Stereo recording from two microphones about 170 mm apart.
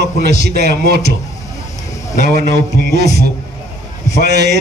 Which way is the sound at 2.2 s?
65° right (ahead or behind).